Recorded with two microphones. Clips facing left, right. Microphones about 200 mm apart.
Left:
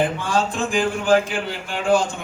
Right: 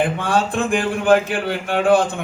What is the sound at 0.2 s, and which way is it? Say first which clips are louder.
A man's voice: right 3 dB; 60° right (ahead or behind).